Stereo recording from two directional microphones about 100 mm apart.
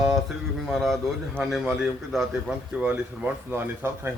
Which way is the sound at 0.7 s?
Centre (ahead or behind).